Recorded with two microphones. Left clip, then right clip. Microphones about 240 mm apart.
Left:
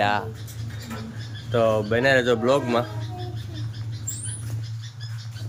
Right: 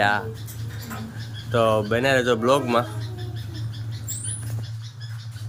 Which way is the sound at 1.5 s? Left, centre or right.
Centre.